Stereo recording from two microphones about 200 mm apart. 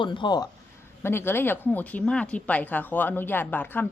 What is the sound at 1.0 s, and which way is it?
Speech, 10° left (ahead or behind).